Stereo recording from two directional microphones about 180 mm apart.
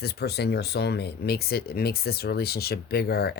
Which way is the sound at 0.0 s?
65° left (ahead or behind).